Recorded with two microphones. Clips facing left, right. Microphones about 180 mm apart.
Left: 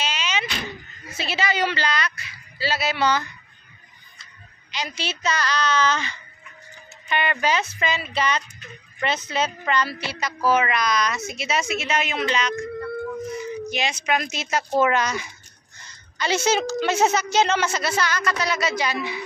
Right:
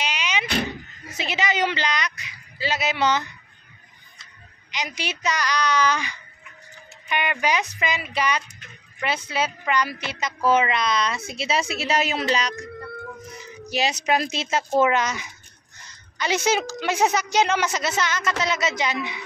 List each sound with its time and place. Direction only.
0.0 s a sound: 15° right (ahead or behind)
1.1 s a woman's voice: 20° right (ahead or behind)
4.6 s a woman's voice: 15° right (ahead or behind); by 12.6 s 35° right (ahead or behind)
13.7 s a woman's voice: 35° right (ahead or behind); by 19.2 s 20° right (ahead or behind)